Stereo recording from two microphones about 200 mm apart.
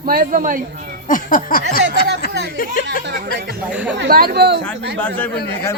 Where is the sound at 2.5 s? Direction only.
45° left (ahead or behind).